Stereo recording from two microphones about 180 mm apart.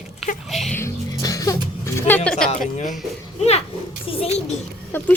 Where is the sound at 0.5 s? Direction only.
Centre (ahead or behind).